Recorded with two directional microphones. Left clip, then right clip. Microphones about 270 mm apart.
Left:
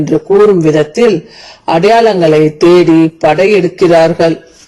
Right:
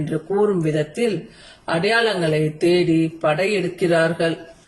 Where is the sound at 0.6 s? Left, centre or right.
Left.